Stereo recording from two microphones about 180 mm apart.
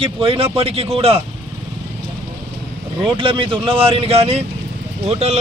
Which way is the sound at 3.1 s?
30° right (ahead or behind).